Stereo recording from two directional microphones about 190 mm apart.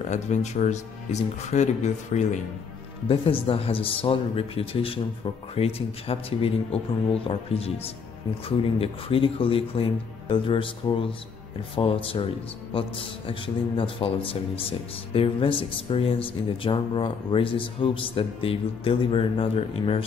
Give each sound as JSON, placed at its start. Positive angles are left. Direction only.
{"t": 0.1, "sound": "a man's voice", "side_deg": 40}